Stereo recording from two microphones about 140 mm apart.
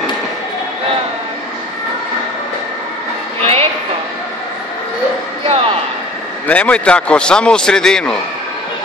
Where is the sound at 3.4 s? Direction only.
45° right (ahead or behind).